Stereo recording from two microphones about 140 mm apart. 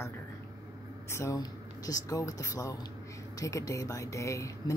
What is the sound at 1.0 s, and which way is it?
Speech, 20° left (ahead or behind).